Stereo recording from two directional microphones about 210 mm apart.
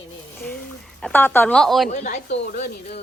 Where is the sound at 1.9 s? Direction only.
35° left (ahead or behind).